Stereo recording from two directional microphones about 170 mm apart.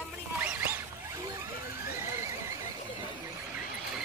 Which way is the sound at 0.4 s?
10° right (ahead or behind).